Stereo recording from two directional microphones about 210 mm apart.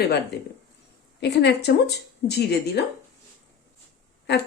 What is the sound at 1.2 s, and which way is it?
Speech, 55° left (ahead or behind).